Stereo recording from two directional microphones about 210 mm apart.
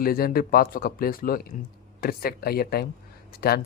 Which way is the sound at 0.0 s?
45° left (ahead or behind).